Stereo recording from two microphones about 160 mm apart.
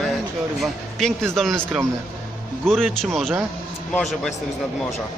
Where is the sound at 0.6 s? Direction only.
Centre (ahead or behind).